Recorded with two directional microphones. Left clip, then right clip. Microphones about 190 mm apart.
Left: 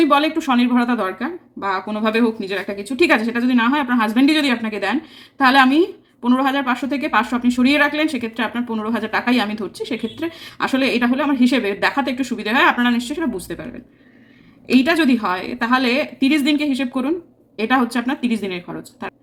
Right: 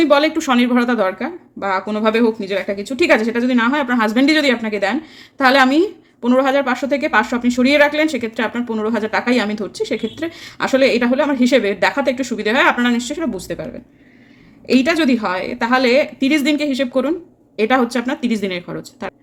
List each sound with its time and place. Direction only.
0.0 s a woman's voice: 30° right (ahead or behind)
14.7 s a woman's voice: 30° right (ahead or behind)